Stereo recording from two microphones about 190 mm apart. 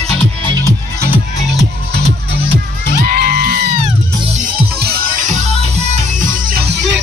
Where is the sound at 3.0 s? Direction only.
55° right (ahead or behind).